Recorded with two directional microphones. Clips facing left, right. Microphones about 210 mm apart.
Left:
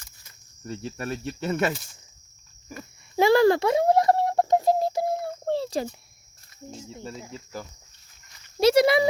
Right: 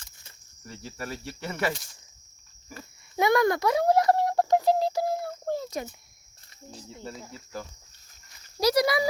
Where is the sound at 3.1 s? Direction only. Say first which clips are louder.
Left 5 dB; 30° left (ahead or behind).